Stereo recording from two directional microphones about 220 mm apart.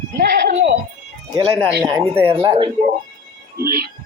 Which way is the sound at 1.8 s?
15° right (ahead or behind).